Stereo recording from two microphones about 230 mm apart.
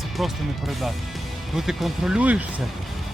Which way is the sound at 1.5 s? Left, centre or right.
Centre.